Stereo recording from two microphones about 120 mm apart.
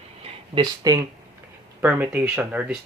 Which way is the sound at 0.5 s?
35° right (ahead or behind).